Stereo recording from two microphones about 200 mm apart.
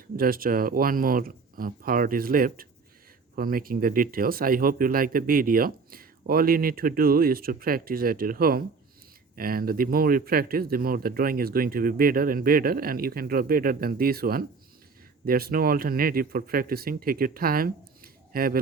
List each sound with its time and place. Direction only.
0.2 s speech: 45° right (ahead or behind)